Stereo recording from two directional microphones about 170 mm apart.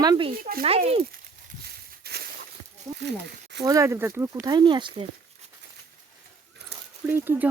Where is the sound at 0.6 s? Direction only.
35° right (ahead or behind).